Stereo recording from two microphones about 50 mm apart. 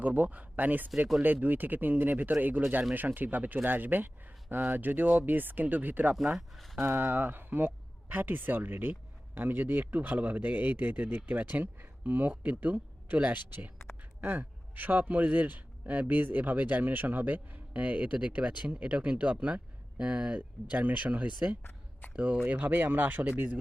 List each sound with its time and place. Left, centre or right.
0.0 s speech: right
6.1 s speech: centre
6.7 s speech: right
20.7 s speech: right